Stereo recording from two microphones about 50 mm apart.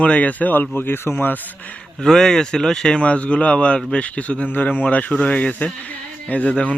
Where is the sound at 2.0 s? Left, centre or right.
Centre.